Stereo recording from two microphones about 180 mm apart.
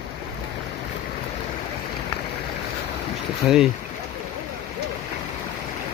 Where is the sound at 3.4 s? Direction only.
Centre (ahead or behind).